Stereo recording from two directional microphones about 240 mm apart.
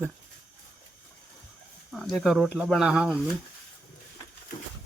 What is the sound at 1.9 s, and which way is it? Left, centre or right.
Speech, centre.